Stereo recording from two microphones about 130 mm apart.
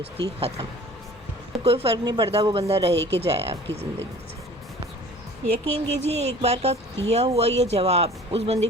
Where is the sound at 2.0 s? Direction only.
35° right (ahead or behind).